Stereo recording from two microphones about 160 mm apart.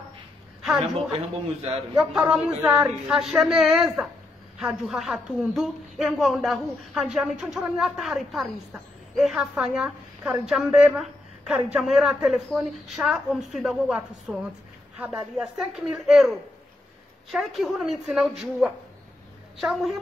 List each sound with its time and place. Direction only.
0.6 s a sound: centre (ahead or behind)
0.9 s a man's voice: 40° right (ahead or behind)
2.0 s a woman's voice: 5° right (ahead or behind)
19.6 s a woman's voice: centre (ahead or behind)